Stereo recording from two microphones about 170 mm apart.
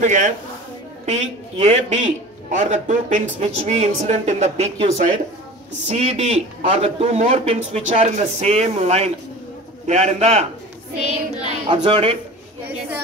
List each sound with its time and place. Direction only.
0.0 s a man's voice: 45° right (ahead or behind)
11.4 s a man's voice: 30° right (ahead or behind)